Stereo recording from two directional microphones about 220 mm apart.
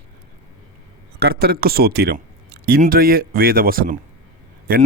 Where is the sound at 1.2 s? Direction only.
45° right (ahead or behind).